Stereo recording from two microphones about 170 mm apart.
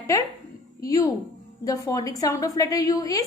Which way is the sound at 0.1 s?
20° left (ahead or behind).